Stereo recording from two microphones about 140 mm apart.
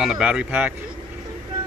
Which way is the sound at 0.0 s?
5° right (ahead or behind).